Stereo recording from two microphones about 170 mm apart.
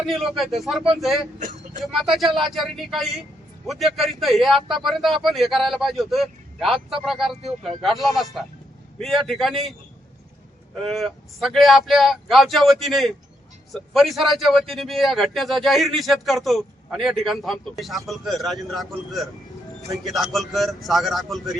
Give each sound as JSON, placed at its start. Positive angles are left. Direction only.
{"t": 0.0, "sound": "a man's voice", "side_deg": 0}
{"t": 1.4, "sound": "vehicle", "side_deg": -45}
{"t": 1.8, "sound": "a man's voice", "side_deg": 0}
{"t": 10.8, "sound": "a man's voice", "side_deg": 0}